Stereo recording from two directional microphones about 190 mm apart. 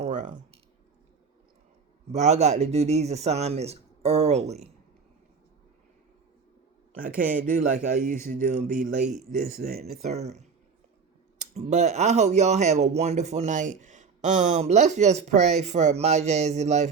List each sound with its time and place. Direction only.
0.0 s a sound: 40° right (ahead or behind)
2.1 s speech: 35° right (ahead or behind)
7.2 s speech: 45° right (ahead or behind)
10.0 s speech: 35° right (ahead or behind)
11.6 s speech: 40° right (ahead or behind)